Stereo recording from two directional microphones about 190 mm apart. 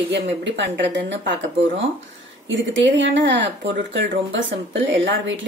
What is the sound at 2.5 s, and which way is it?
Speech, 75° right (ahead or behind).